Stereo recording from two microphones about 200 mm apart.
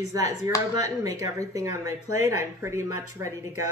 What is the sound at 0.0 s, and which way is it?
Speech, 15° right (ahead or behind).